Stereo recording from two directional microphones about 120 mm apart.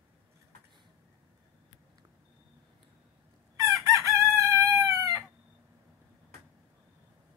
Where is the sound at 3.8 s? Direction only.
25° right (ahead or behind).